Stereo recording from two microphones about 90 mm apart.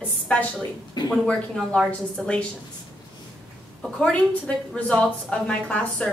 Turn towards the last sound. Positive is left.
turn(degrees=10)  # may be behind; listen again after turning